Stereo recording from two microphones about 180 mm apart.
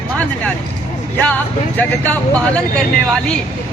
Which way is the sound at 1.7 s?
10° left (ahead or behind).